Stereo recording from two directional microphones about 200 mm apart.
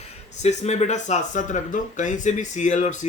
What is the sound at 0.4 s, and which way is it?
Speech, 35° left (ahead or behind).